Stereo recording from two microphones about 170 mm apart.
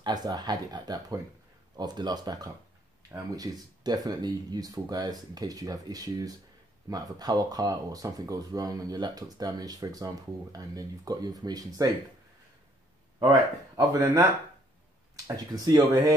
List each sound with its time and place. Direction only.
0.0 s speech: 25° right (ahead or behind)
13.2 s speech: 25° right (ahead or behind)
15.2 s speech: 20° right (ahead or behind)